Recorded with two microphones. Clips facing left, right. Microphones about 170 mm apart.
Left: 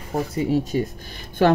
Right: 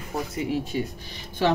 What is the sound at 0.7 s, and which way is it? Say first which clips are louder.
Speech: left 5 dB; 40° left (ahead or behind).